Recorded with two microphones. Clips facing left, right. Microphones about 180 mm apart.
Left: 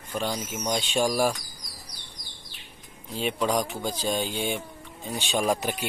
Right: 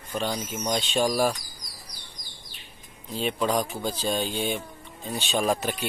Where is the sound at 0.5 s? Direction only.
15° left (ahead or behind).